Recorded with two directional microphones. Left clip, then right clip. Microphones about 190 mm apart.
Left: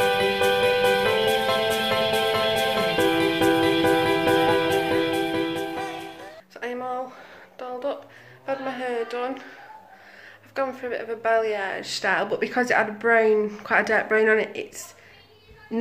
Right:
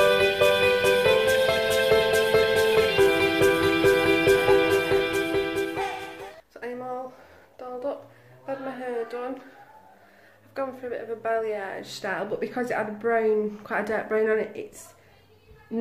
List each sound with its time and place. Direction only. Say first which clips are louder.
0.0 s music: right 1 dB; centre (ahead or behind)
6.5 s a sound: left 4 dB; 5° left (ahead or behind)
10.5 s speech: left 4 dB; 5° left (ahead or behind)